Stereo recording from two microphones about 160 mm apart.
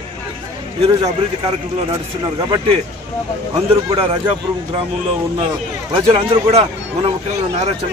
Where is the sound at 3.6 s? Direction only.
35° right (ahead or behind).